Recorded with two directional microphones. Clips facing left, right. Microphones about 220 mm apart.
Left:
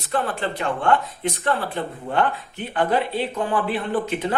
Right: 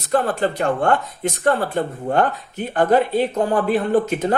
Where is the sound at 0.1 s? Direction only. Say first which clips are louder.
Right 5 dB; 40° right (ahead or behind).